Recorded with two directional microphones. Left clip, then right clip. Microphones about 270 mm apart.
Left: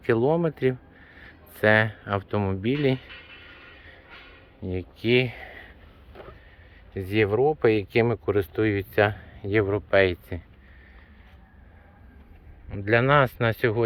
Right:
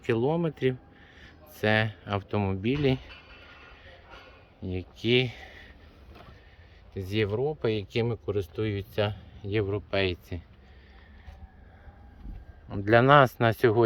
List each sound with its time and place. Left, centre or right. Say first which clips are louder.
0.0 s speech: left 5 dB; centre
3.1 s a sound: left 5 dB; right
4.6 s speech: left 3 dB; centre
6.9 s speech: left 6 dB; centre
12.6 s speech: right 1 dB; centre